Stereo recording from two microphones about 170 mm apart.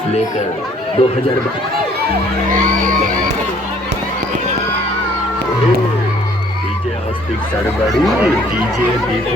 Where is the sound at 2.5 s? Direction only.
50° right (ahead or behind).